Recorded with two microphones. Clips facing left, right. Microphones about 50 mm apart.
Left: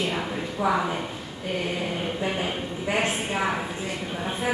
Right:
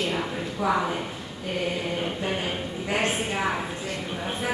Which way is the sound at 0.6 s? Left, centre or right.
Centre.